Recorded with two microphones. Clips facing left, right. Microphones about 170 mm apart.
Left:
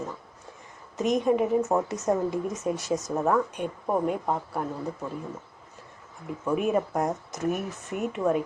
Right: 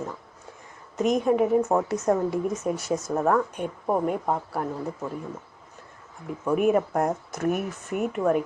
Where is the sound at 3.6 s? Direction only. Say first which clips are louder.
Right 1 dB; 15° right (ahead or behind).